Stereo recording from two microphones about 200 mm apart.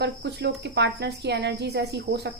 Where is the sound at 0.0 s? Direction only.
55° right (ahead or behind).